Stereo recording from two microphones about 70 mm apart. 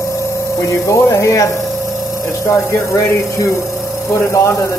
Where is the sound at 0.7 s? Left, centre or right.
Left.